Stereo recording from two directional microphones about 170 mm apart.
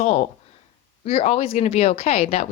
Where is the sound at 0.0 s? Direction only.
40° left (ahead or behind).